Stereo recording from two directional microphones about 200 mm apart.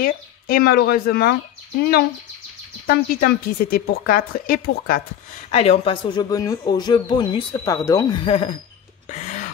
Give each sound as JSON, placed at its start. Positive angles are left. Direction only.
{"t": 0.0, "sound": "speech", "side_deg": 45}
{"t": 5.5, "sound": "speech", "side_deg": 30}
{"t": 9.2, "sound": "a sound", "side_deg": 35}